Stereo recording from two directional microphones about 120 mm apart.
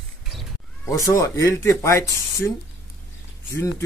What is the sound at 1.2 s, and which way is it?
Speech, 25° left (ahead or behind).